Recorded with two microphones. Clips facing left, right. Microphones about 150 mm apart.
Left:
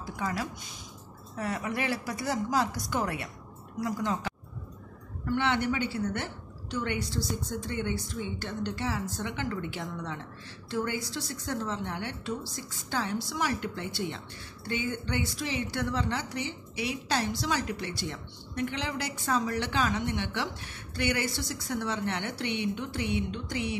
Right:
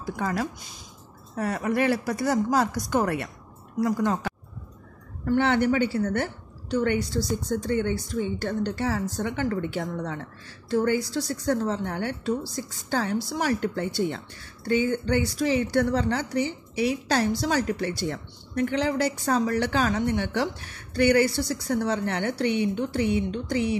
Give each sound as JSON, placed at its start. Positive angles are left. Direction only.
{"t": 0.1, "sound": "a woman's voice", "side_deg": -50}